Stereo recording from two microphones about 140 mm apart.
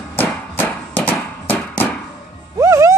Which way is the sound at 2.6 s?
20° right (ahead or behind).